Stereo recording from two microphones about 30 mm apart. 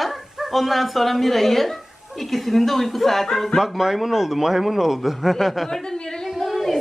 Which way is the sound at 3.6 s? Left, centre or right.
Centre.